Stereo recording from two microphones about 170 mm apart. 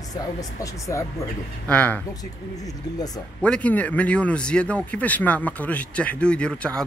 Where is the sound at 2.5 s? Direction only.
20° left (ahead or behind).